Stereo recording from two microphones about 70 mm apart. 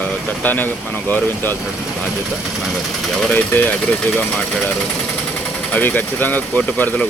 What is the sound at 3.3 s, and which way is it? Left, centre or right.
Speech, left.